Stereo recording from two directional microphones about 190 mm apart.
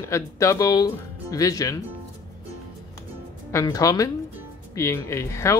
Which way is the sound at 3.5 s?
15° left (ahead or behind).